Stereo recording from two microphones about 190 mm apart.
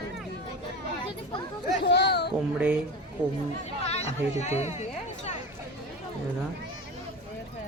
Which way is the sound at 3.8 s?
35° left (ahead or behind).